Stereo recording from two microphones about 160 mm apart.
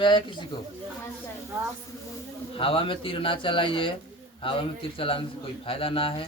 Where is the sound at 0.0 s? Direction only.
30° left (ahead or behind).